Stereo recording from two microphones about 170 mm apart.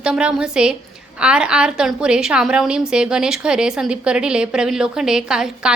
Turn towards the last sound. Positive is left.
turn(degrees=-5)  # may be behind; listen again after turning